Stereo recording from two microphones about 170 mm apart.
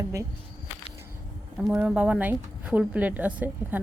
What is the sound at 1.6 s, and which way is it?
A woman's voice, 5° right (ahead or behind).